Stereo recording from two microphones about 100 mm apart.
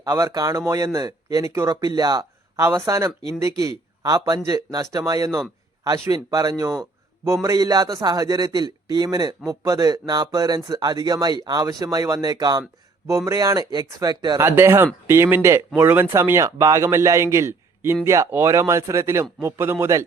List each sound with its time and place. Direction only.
0.0 s a man's voice: 35° right (ahead or behind)
14.4 s a man's voice: 25° right (ahead or behind)